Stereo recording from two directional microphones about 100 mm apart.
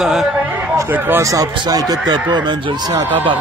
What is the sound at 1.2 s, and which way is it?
Speech, 35° right (ahead or behind).